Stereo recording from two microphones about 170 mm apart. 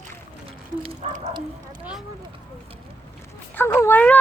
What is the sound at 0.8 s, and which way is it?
Speech, 35° right (ahead or behind).